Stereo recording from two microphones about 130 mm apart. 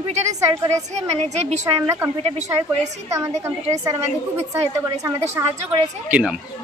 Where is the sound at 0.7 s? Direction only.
55° right (ahead or behind).